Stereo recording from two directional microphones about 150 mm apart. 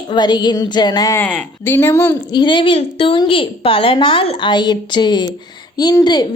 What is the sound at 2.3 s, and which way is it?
A woman's voice, 30° left (ahead or behind).